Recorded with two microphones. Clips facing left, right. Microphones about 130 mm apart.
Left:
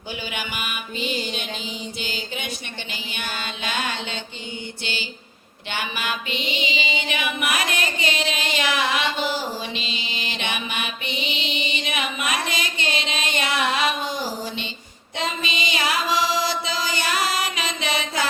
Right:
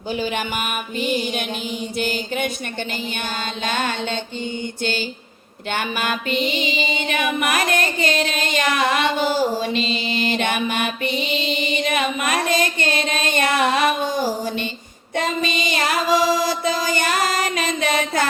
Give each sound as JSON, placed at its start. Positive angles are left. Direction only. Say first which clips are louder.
{"t": 0.1, "sound": "music", "louder": "right 8 dB", "side_deg": -40}
{"t": 1.2, "sound": "music", "louder": "right 5 dB", "side_deg": -10}
{"t": 2.0, "sound": "music", "louder": "right 12 dB", "side_deg": -50}
{"t": 9.9, "sound": "music", "louder": "right 9 dB", "side_deg": 0}
{"t": 10.2, "sound": "music", "louder": "right 8 dB", "side_deg": -50}
{"t": 11.9, "sound": "a sound", "louder": "right 4 dB", "side_deg": -50}
{"t": 15.1, "sound": "mantra", "louder": "right 5 dB", "side_deg": -55}